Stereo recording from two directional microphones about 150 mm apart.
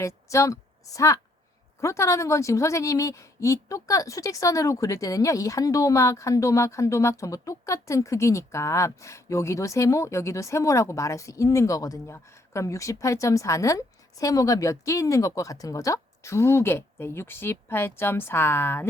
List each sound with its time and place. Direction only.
0.3 s a woman's voice: 20° left (ahead or behind)